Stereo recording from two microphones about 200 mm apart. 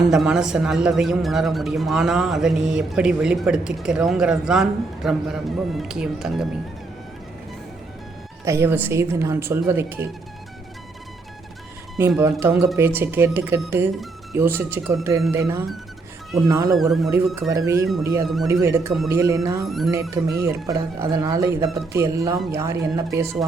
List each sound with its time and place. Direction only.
0.1 s a man's voice: centre (ahead or behind)
8.4 s speech: 10° right (ahead or behind)
12.2 s speech: 10° right (ahead or behind)
16.7 s a man's voice: centre (ahead or behind)
17.5 s speech: 15° right (ahead or behind)
19.6 s a man's voice: centre (ahead or behind)
19.9 s speech: 15° right (ahead or behind)